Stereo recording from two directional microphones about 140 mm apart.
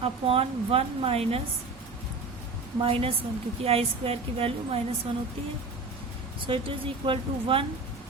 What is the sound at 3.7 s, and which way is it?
A woman's voice, 45° right (ahead or behind).